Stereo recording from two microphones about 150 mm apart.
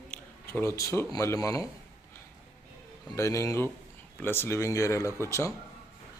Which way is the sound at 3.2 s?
20° left (ahead or behind).